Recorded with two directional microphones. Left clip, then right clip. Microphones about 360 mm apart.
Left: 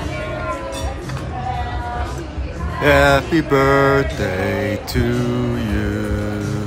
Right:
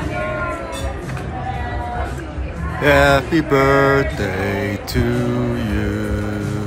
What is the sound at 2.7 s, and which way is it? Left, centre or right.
Music, centre.